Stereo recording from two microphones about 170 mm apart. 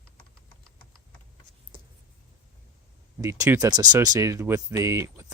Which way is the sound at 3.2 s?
20° right (ahead or behind).